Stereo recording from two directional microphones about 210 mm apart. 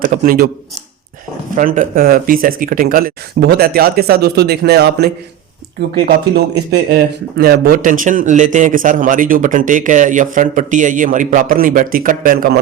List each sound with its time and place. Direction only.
0.0 s speech: 40° right (ahead or behind)
1.5 s speech: 35° right (ahead or behind)
6.7 s speech: 45° right (ahead or behind)